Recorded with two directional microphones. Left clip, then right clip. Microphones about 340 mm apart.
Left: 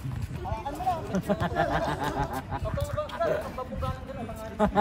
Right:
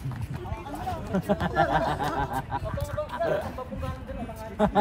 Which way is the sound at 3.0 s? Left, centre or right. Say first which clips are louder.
Right 1 dB; left.